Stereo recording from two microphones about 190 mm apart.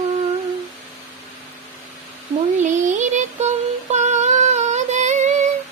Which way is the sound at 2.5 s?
40° right (ahead or behind).